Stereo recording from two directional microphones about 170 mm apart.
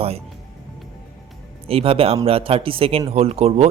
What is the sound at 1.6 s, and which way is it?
Speech, 35° right (ahead or behind).